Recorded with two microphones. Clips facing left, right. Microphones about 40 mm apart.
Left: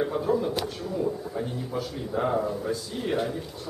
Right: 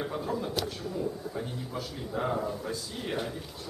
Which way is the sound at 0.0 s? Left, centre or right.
Centre.